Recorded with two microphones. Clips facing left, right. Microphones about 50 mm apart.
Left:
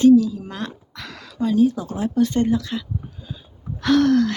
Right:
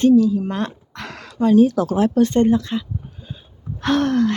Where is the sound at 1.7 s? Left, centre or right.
Right.